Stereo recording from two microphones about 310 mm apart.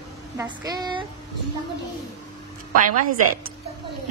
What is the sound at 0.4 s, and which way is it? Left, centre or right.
Speech, centre.